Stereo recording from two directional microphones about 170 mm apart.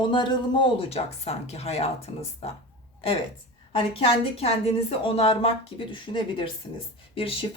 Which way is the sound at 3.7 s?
35° left (ahead or behind).